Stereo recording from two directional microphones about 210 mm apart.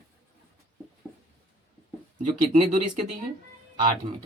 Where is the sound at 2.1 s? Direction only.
35° right (ahead or behind).